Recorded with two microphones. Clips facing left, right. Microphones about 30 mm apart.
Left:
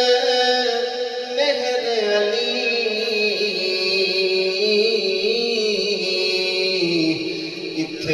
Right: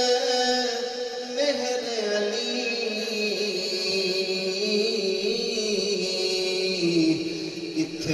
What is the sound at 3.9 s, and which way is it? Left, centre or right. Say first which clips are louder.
Music: left 7 dB; left.